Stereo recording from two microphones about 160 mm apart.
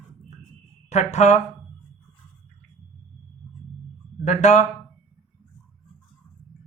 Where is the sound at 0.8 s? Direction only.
45° left (ahead or behind).